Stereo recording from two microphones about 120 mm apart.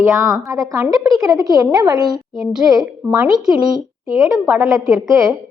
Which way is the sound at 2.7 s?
35° right (ahead or behind).